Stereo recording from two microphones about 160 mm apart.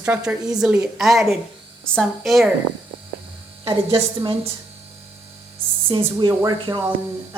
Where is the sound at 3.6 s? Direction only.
30° right (ahead or behind).